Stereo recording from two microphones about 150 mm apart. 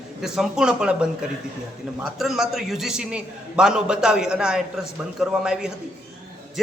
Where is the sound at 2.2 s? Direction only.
Centre (ahead or behind).